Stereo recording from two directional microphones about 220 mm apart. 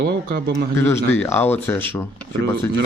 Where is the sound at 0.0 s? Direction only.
45° right (ahead or behind).